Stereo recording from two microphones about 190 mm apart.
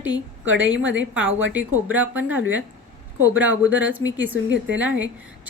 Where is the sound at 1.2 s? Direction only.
90° right.